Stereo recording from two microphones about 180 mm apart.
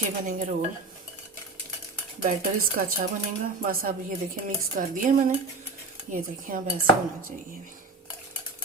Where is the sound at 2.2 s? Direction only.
50° right (ahead or behind).